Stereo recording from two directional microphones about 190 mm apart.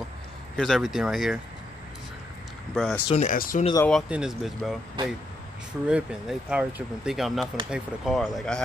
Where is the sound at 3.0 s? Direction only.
40° left (ahead or behind).